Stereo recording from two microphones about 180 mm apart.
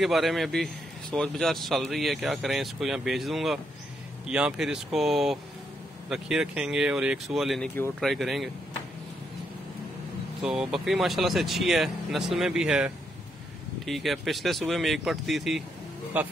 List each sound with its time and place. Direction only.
0.0 s speech: centre (ahead or behind)
10.4 s speech: 5° right (ahead or behind)